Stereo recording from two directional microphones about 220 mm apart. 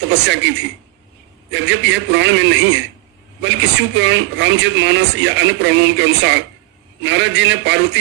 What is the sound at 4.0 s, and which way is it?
Speech, 55° right (ahead or behind).